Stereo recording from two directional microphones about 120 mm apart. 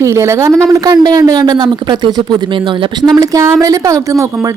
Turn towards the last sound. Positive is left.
turn(degrees=-25)  # may be behind; listen again after turning